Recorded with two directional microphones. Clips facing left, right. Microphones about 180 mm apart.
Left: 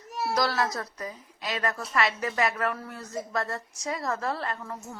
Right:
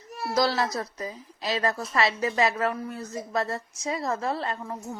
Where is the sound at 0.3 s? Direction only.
25° right (ahead or behind).